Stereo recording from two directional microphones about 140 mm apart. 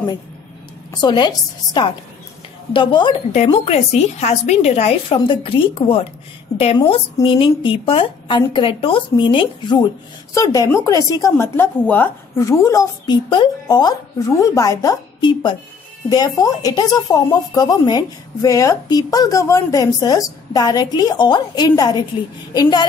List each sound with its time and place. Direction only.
1.0 s a woman's voice: 30° left (ahead or behind)
3.5 s a woman's voice: 50° left (ahead or behind)
5.1 s a woman's voice: 35° left (ahead or behind)
10.3 s speech: 25° left (ahead or behind)
12.4 s speech: 25° left (ahead or behind)